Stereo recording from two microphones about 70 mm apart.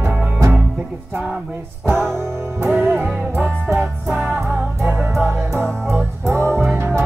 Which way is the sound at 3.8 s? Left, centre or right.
Right.